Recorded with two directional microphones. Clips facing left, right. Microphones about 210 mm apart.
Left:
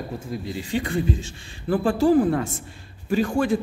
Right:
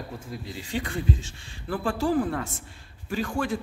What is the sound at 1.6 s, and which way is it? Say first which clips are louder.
Speech: left 7 dB; 20° left (ahead or behind).